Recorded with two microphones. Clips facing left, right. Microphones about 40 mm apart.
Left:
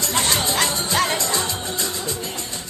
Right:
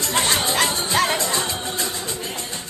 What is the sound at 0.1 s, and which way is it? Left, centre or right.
Music, centre.